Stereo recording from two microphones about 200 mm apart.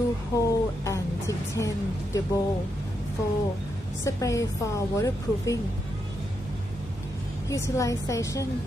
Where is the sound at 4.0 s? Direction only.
15° left (ahead or behind).